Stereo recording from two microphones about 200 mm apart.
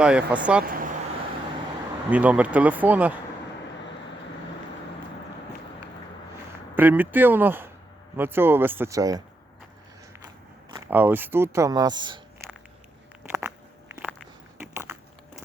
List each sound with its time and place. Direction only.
0.0 s speech: 5° right (ahead or behind)
0.6 s speech: 45° right (ahead or behind)
2.0 s speech: 5° right (ahead or behind)
6.7 s speech: 10° right (ahead or behind)
10.8 s speech: 10° right (ahead or behind)
13.2 s crunch: 10° right (ahead or behind)
14.6 s a sound: 10° right (ahead or behind)